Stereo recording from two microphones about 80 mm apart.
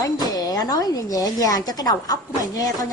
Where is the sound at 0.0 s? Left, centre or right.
Left.